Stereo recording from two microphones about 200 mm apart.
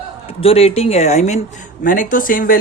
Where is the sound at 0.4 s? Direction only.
30° left (ahead or behind).